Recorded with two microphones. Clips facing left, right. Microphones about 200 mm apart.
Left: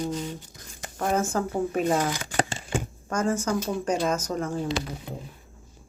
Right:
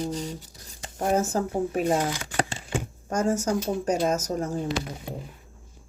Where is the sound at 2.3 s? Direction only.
40° left (ahead or behind).